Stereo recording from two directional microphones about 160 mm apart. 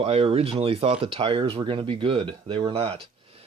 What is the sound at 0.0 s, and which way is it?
Speech, 35° right (ahead or behind).